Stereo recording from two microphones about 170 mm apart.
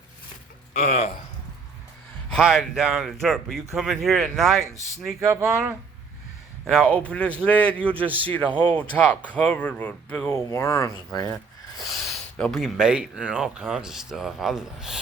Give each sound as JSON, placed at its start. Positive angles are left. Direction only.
{"t": 0.7, "sound": "speech", "side_deg": 40}
{"t": 2.3, "sound": "speech", "side_deg": 0}
{"t": 5.2, "sound": "speech", "side_deg": -15}
{"t": 6.7, "sound": "a man's voice", "side_deg": 5}
{"t": 11.9, "sound": "speech", "side_deg": 0}